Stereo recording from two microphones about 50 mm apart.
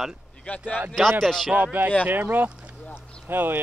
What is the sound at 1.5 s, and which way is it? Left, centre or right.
Speech, right.